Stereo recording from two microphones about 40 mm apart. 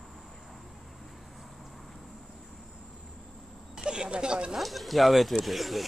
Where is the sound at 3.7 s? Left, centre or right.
Right.